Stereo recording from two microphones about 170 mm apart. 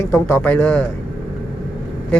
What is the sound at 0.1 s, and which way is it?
Speech, 15° left (ahead or behind).